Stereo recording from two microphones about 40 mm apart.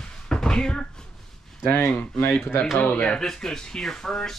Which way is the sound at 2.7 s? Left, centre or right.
Left.